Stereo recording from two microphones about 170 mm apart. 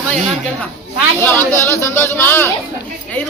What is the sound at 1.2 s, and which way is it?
Speech, 10° left (ahead or behind).